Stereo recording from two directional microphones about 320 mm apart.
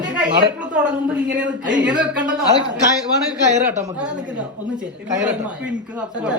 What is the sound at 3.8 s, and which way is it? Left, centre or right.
A man's voice, centre.